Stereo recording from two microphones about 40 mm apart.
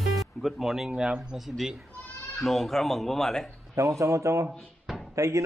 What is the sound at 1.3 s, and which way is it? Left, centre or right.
Speech, centre.